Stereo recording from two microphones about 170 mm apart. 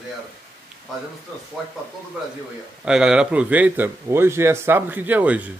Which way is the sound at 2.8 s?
5° right (ahead or behind).